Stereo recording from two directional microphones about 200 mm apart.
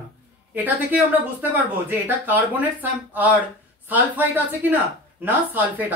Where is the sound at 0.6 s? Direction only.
10° right (ahead or behind).